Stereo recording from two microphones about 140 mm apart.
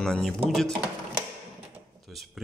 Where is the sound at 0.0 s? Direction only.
5° left (ahead or behind).